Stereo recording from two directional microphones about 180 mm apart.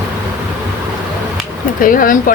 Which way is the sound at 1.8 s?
50° left (ahead or behind).